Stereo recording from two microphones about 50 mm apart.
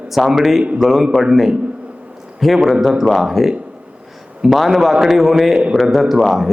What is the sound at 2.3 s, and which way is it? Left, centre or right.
A man's voice, centre.